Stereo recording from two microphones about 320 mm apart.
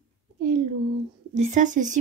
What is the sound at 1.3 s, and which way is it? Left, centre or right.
Speech, right.